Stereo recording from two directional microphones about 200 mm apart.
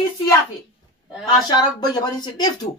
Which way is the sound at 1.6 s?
20° left (ahead or behind).